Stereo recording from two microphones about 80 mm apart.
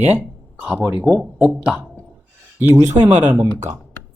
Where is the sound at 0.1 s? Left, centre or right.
Centre.